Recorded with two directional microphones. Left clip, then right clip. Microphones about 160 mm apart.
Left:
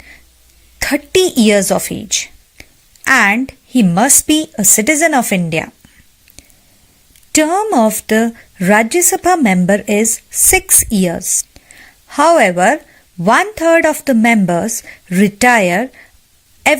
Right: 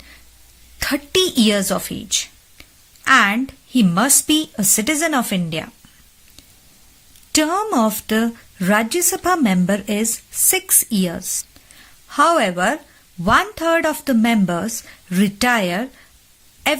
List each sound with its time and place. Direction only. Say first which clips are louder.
0.8 s a woman's voice: left 5 dB; 20° left (ahead or behind)
7.3 s speech: left 6 dB; 20° left (ahead or behind)